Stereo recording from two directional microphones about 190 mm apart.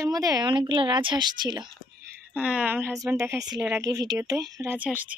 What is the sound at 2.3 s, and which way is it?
Speech, 5° right (ahead or behind).